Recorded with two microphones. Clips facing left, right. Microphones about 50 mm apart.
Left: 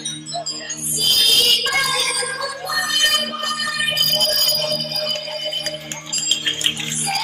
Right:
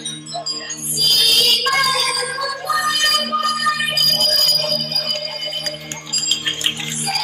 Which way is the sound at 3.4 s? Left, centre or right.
Right.